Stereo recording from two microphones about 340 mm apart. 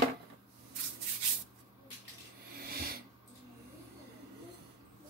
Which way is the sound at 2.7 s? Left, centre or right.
Right.